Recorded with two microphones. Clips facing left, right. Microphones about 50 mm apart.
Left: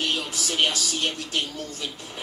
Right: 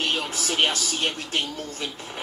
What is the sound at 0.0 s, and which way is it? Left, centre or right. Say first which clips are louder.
A man's voice: right 1 dB; right.